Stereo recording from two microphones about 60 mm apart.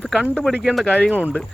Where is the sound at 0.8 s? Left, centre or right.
Centre.